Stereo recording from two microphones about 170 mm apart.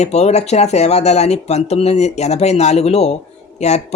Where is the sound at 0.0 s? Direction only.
40° left (ahead or behind).